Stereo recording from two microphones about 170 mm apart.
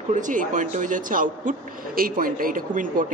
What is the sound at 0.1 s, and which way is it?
Speech, 50° right (ahead or behind).